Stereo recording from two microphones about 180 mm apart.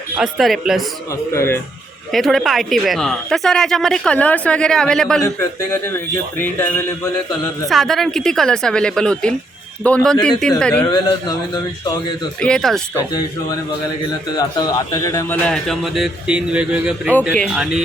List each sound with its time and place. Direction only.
0.2 s speech: centre (ahead or behind)
1.3 s speech: 15° left (ahead or behind)
2.1 s speech: centre (ahead or behind)
5.2 s speech: 15° left (ahead or behind)
7.7 s speech: centre (ahead or behind)
10.8 s speech: 25° left (ahead or behind)
12.4 s speech: 5° left (ahead or behind)
14.3 s speech: 20° left (ahead or behind)
15.4 s speech: centre (ahead or behind)